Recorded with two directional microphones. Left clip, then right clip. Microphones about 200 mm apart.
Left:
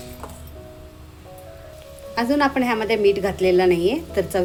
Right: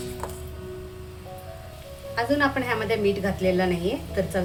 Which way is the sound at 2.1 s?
40° left (ahead or behind).